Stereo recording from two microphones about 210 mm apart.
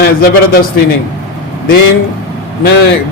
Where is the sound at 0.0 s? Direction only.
45° left (ahead or behind).